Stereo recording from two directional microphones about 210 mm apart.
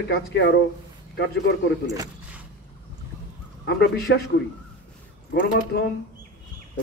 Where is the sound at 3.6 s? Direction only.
50° left (ahead or behind).